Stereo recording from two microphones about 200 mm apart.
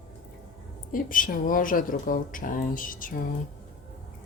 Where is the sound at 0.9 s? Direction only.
40° left (ahead or behind).